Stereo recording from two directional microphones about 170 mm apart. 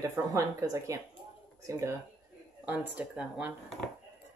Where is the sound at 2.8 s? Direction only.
10° right (ahead or behind).